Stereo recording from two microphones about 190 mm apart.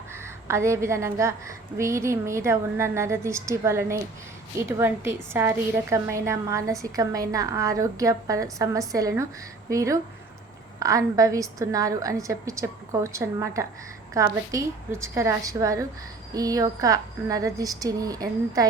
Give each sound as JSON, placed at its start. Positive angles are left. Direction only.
{"t": 0.1, "sound": "a woman's voice", "side_deg": -15}